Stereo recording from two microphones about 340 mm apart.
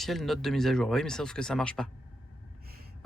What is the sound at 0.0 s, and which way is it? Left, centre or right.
Speech, centre.